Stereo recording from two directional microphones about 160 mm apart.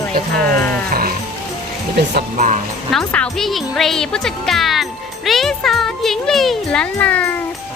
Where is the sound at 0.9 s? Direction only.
65° right (ahead or behind).